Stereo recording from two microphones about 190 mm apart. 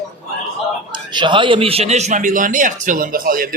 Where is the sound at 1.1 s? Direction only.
25° right (ahead or behind); by 3.4 s 50° right (ahead or behind).